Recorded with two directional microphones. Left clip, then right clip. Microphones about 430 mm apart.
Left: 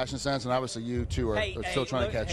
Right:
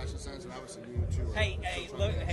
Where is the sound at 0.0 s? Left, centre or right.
Left.